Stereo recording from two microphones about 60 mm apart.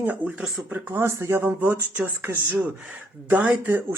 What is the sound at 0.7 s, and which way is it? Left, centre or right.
Speech, right.